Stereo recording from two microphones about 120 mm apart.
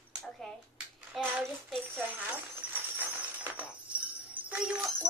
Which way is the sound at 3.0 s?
15° right (ahead or behind).